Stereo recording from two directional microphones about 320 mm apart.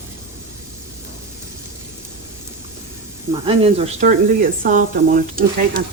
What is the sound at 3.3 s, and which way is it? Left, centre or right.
Speech, centre.